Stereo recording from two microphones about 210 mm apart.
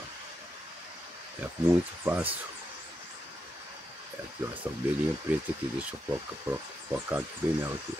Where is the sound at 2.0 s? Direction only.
10° right (ahead or behind).